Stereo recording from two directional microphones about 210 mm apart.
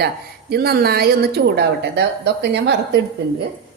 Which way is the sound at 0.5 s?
50° right (ahead or behind).